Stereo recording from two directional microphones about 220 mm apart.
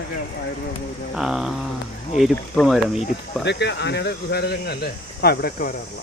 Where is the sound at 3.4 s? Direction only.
50° left (ahead or behind).